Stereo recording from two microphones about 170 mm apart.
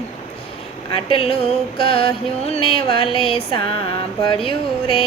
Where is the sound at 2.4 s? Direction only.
35° left (ahead or behind).